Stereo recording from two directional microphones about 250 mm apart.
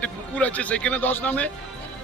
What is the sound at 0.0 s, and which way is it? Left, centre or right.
A man's voice, centre.